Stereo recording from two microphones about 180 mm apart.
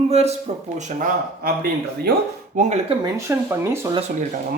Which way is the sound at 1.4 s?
60° right (ahead or behind).